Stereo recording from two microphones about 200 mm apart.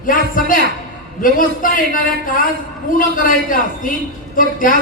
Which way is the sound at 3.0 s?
45° left (ahead or behind).